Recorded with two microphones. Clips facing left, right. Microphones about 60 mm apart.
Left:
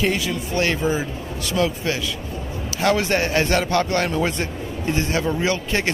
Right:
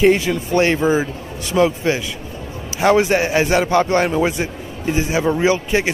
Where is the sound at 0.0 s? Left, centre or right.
Right.